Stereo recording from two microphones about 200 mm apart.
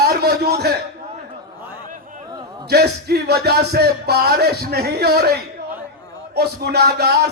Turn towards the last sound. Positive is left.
turn(degrees=-55)  # may be behind; listen again after turning